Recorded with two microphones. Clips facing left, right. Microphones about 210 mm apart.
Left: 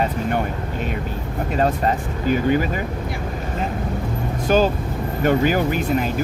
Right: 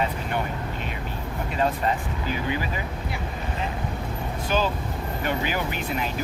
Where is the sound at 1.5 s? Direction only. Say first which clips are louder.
Left 5 dB; 45° left (ahead or behind).